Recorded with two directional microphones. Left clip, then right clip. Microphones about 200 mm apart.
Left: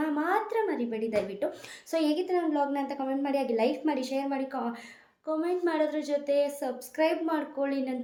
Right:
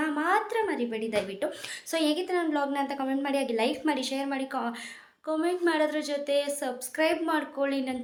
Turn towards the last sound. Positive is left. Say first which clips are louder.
# right 1 dB
turn(degrees=5)  # may be behind; listen again after turning